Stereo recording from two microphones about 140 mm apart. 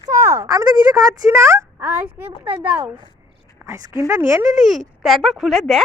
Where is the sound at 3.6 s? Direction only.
15° right (ahead or behind).